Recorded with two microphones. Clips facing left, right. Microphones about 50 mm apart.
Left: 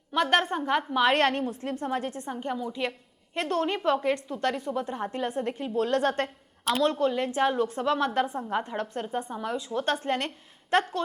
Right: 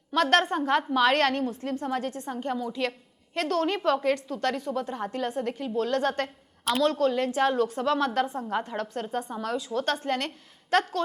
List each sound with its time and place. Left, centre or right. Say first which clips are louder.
0.1 s a woman's voice: right 2 dB; centre
1.1 s a woman's voice: even; left
2.2 s a woman's voice: right 1 dB; centre; by 6.2 s left
6.8 s a woman's voice: right 2 dB; left